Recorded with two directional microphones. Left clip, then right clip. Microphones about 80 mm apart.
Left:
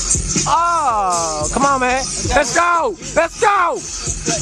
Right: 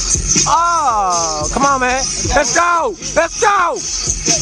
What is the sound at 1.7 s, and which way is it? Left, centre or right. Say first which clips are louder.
Speech: right 1 dB; centre.